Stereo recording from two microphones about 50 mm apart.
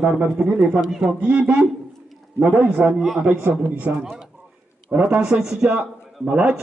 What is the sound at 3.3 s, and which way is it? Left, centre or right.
Speech, right.